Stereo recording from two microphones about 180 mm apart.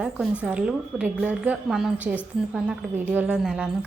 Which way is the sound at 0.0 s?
5° right (ahead or behind).